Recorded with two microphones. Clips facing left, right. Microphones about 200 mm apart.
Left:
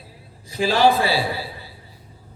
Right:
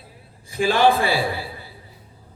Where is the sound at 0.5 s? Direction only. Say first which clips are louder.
Even; 50° right (ahead or behind).